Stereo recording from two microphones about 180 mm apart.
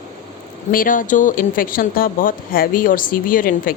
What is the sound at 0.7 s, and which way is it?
Speech, 50° left (ahead or behind).